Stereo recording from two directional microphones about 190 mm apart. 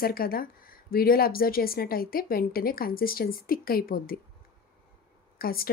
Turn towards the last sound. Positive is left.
turn(degrees=50)  # may be behind; listen again after turning